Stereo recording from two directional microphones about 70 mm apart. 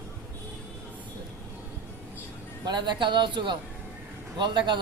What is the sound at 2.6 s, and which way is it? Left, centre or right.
Speech, right.